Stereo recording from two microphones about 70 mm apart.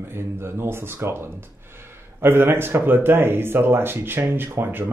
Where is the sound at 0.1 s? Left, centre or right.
Right.